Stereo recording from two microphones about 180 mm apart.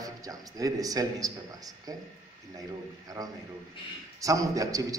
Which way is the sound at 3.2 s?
20° right (ahead or behind).